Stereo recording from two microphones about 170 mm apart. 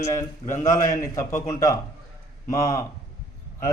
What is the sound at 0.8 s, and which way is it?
Speech, 50° left (ahead or behind).